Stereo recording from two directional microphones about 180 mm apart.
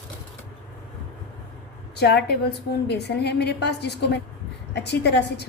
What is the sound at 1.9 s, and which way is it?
A woman's voice, 65° left (ahead or behind).